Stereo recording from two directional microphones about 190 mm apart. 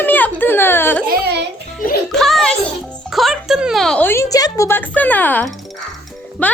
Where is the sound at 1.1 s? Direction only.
60° right (ahead or behind).